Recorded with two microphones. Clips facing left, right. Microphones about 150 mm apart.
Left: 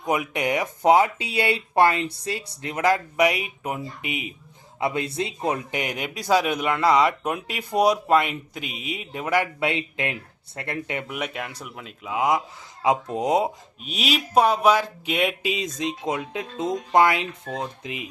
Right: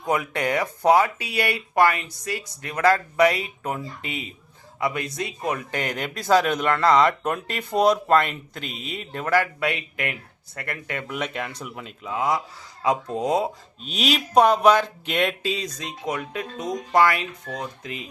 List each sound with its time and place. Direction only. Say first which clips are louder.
0.0 s speech: even; 15° left (ahead or behind)
11.1 s speech: right 1 dB; 5° left (ahead or behind)
12.1 s speech: left 2 dB; 20° left (ahead or behind)
13.8 s speech: right 2 dB; 5° left (ahead or behind)